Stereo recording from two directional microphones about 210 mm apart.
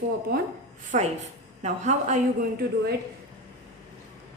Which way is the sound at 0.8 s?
35° right (ahead or behind).